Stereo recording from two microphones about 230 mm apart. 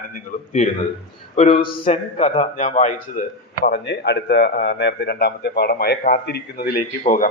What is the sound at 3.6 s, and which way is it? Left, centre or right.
A man's voice, left.